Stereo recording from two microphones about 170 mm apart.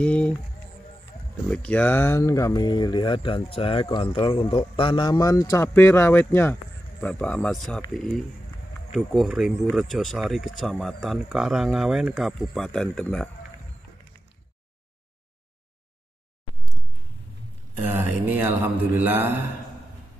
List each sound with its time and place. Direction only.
0.0 s speech: 5° left (ahead or behind)
1.5 s speech: 10° left (ahead or behind)
17.9 s mantra: 10° right (ahead or behind)